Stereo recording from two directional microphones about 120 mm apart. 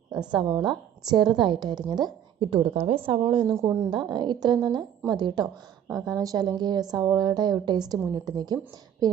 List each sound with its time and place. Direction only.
0.2 s a woman's voice: 40° right (ahead or behind)
3.5 s speech: 25° right (ahead or behind)
3.8 s a woman's voice: 40° right (ahead or behind)